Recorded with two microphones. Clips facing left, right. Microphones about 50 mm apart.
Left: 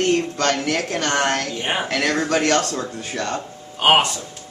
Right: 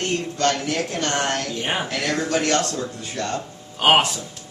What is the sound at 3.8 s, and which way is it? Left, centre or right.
Speech, centre.